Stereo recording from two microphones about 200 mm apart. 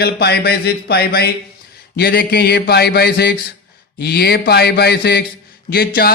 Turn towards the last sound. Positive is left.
turn(degrees=50)  # may be behind; listen again after turning